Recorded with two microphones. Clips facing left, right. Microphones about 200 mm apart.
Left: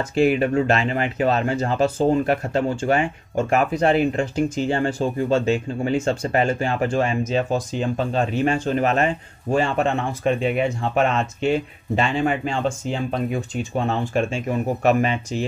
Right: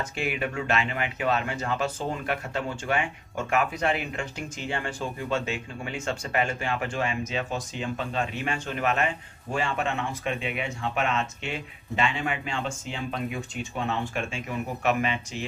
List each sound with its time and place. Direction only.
0.1 s speech: 35° left (ahead or behind)